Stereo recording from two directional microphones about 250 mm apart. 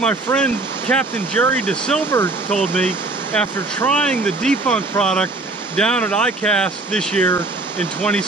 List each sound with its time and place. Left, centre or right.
0.0 s speech: centre